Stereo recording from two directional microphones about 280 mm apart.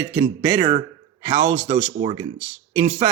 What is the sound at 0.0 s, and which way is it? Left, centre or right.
Speech, centre.